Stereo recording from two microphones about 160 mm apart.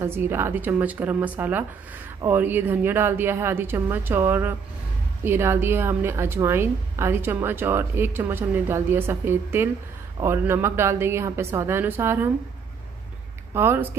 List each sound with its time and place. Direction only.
0.0 s a woman's voice: 15° right (ahead or behind)
13.5 s speech: 15° right (ahead or behind)